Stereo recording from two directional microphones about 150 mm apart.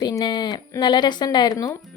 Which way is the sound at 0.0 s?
25° left (ahead or behind).